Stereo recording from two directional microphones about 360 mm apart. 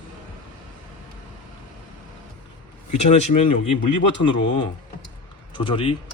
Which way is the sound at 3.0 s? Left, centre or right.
Centre.